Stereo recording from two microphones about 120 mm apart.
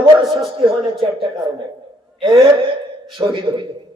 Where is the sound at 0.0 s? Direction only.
50° right (ahead or behind).